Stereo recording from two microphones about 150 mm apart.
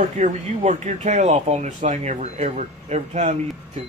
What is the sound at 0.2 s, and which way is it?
Speech, 50° right (ahead or behind).